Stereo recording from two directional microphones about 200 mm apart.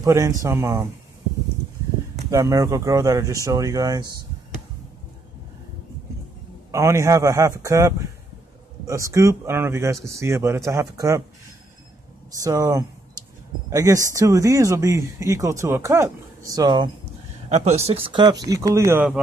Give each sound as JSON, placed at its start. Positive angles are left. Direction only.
{"t": 0.0, "sound": "speech", "side_deg": -15}
{"t": 2.3, "sound": "speech", "side_deg": -15}
{"t": 6.7, "sound": "speech", "side_deg": -15}
{"t": 12.4, "sound": "speech", "side_deg": -15}
{"t": 17.5, "sound": "speech", "side_deg": -35}